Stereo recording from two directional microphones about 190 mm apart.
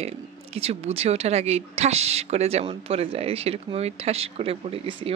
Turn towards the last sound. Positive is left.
turn(degrees=-30)  # may be behind; listen again after turning